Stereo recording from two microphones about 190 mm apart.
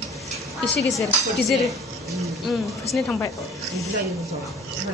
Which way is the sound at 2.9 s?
5° left (ahead or behind).